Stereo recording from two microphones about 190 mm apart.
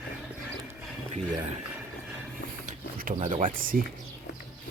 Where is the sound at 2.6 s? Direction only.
45° right (ahead or behind).